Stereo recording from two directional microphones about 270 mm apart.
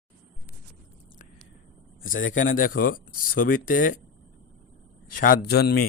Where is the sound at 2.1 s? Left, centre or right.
Left.